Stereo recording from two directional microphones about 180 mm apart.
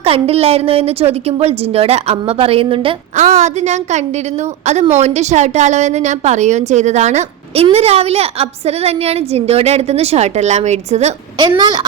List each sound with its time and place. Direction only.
0.0 s a woman's voice: 35° right (ahead or behind)
3.2 s a woman's voice: 40° right (ahead or behind)
11.3 s a woman's voice: 25° right (ahead or behind)